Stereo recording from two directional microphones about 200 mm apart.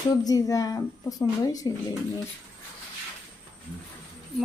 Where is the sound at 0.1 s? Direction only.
20° left (ahead or behind).